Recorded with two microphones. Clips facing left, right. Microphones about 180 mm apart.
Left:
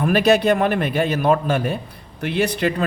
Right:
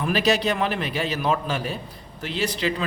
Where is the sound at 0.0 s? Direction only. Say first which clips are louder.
Left 6 dB; 55° left (ahead or behind).